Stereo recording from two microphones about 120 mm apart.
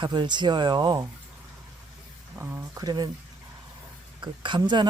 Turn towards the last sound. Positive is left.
turn(degrees=-40)  # may be behind; listen again after turning